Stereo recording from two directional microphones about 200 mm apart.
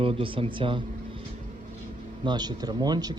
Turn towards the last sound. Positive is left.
turn(degrees=-20)  # may be behind; listen again after turning